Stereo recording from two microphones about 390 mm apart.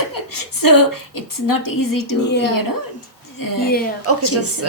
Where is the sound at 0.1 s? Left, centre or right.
Left.